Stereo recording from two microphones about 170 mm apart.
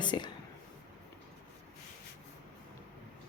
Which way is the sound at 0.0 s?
25° left (ahead or behind).